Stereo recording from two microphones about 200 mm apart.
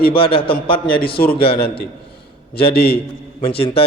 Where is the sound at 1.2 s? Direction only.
50° left (ahead or behind).